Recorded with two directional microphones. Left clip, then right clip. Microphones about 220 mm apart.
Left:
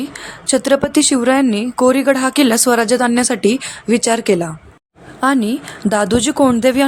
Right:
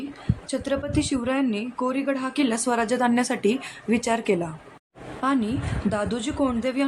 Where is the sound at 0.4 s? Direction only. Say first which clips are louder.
Left 13 dB; 35° left (ahead or behind).